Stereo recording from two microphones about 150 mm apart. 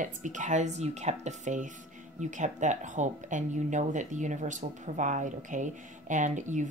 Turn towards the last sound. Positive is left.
turn(degrees=-55)  # may be behind; listen again after turning